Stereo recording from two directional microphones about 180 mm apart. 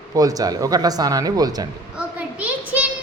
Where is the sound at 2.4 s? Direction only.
10° right (ahead or behind).